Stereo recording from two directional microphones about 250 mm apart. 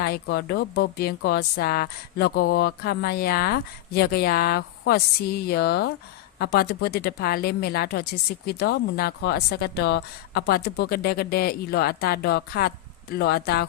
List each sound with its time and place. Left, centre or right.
0.0 s speech: left